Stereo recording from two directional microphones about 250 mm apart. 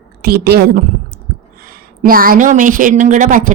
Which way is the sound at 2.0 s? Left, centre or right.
Right.